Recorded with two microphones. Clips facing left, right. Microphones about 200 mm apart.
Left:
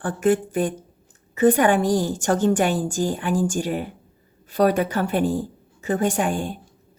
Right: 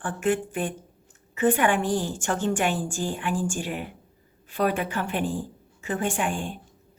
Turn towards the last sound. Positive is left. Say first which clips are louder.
# left 5 dB
turn(degrees=40)  # may be behind; listen again after turning